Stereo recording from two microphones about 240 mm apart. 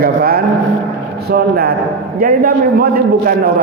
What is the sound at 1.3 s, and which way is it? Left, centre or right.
A man's voice, right.